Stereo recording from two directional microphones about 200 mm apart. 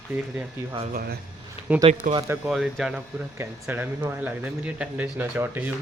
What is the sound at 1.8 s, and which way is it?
Speech, 35° right (ahead or behind).